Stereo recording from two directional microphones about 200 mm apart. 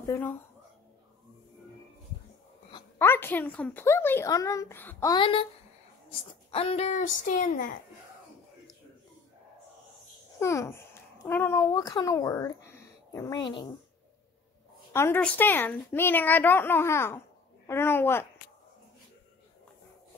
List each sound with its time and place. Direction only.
0.0 s a woman's voice: 10° left (ahead or behind)
2.7 s a woman's voice: 10° left (ahead or behind)
5.1 s speech: 25° left (ahead or behind)
10.4 s a woman's voice: 15° left (ahead or behind)
14.9 s a woman's voice: 10° left (ahead or behind)